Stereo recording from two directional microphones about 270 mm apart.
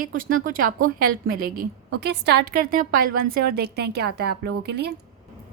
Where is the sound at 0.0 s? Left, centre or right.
Right.